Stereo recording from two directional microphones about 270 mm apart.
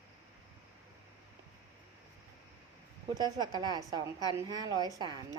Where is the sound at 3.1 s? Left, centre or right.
Centre.